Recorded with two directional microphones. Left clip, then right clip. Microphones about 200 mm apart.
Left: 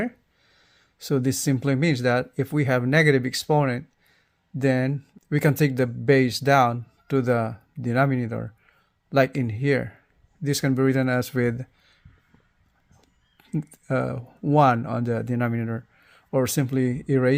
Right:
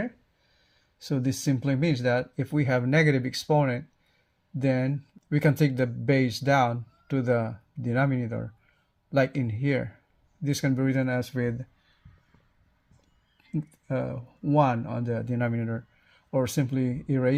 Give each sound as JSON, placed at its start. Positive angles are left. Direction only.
{"t": 1.0, "sound": "speech", "side_deg": 35}
{"t": 13.3, "sound": "speech", "side_deg": 45}